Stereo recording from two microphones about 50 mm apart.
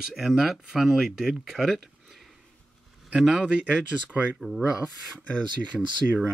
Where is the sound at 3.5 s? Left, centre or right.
Right.